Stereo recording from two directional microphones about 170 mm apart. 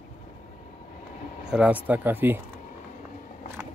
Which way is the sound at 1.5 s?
5° right (ahead or behind).